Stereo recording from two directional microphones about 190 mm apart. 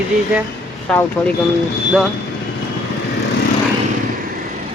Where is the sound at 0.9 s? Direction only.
5° left (ahead or behind).